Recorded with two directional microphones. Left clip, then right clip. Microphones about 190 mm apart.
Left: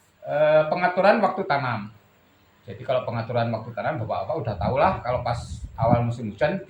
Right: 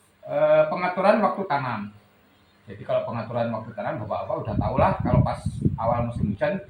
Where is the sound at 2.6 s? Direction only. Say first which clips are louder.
Even; 65° left (ahead or behind).